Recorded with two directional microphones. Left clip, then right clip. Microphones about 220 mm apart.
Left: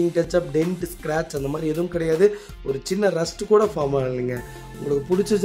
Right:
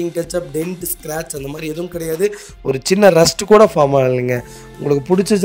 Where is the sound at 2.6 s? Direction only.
35° right (ahead or behind).